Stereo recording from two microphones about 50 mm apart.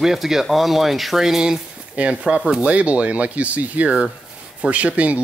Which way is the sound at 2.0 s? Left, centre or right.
Right.